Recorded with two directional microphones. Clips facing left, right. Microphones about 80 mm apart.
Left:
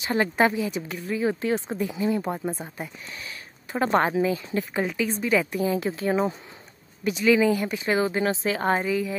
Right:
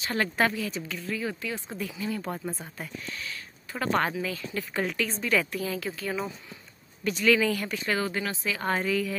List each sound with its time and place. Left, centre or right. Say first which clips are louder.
0.0 s speech: left 4 dB; centre
7.1 s speech: left 4 dB; centre; by 8.8 s left
8.8 s a woman's voice: left 2 dB; centre